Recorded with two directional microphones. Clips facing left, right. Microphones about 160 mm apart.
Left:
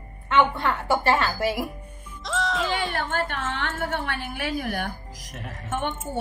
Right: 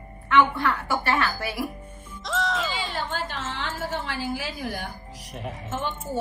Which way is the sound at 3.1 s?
60° left (ahead or behind).